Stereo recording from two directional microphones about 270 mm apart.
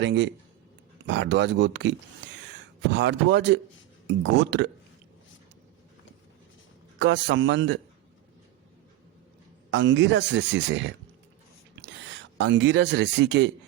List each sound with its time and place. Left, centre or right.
0.0 s speech: right
7.0 s a man's voice: right
9.7 s speech: right